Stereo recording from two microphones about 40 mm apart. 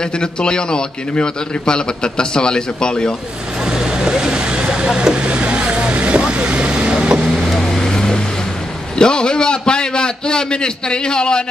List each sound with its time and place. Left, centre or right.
0.0 s a man's voice: left
3.6 s vehicle: centre
7.4 s vehicle: centre
8.9 s a man's voice: left